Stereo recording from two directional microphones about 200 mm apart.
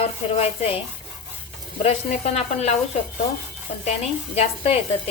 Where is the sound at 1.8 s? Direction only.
30° left (ahead or behind).